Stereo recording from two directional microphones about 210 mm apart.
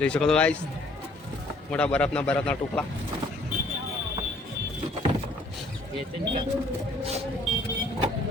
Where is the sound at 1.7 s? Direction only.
5° left (ahead or behind).